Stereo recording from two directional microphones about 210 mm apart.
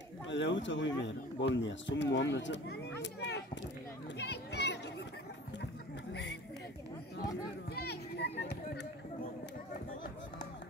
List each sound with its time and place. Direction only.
0.3 s speech: 60° left (ahead or behind)
4.2 s children playing: 55° left (ahead or behind)
7.7 s children playing: 50° left (ahead or behind)